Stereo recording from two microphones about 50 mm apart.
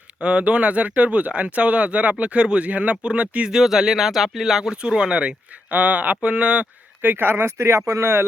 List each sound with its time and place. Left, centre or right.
0.2 s speech: right
3.5 s speech: centre; by 6.7 s right
7.0 s speech: right